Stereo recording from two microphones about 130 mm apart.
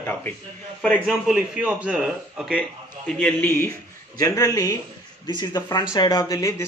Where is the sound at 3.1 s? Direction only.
10° left (ahead or behind).